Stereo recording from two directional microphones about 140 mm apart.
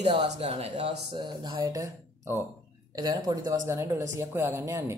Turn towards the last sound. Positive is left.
turn(degrees=-20)  # may be behind; listen again after turning